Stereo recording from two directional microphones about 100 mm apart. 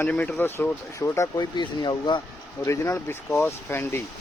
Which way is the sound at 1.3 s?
50° left (ahead or behind).